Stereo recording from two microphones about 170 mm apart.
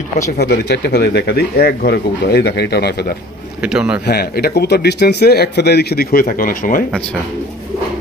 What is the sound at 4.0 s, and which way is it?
Speech, 70° left (ahead or behind).